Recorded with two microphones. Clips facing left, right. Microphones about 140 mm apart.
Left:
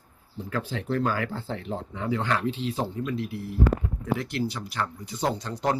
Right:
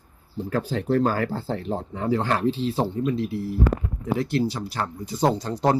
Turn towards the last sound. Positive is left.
turn(degrees=-35)  # may be behind; listen again after turning